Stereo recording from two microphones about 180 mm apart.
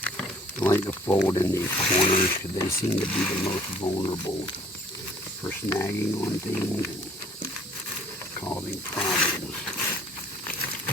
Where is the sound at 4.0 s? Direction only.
25° left (ahead or behind).